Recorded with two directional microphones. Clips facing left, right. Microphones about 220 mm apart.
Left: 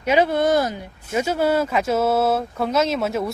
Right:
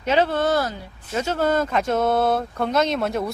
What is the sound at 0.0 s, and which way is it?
Speech, 10° left (ahead or behind).